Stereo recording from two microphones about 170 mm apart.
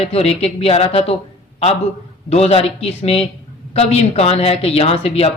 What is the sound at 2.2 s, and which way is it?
Speech, 35° left (ahead or behind).